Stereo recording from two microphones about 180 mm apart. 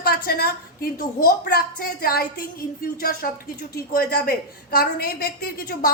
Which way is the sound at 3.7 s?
55° left (ahead or behind).